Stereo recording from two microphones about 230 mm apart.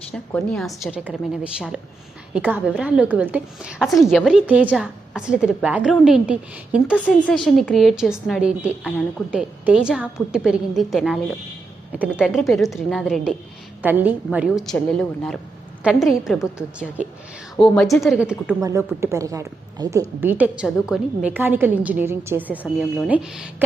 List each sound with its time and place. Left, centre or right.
0.1 s a woman's voice: centre